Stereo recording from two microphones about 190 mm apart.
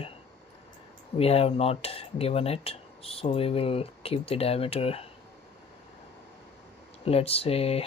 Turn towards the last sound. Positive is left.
turn(degrees=30)  # may be behind; listen again after turning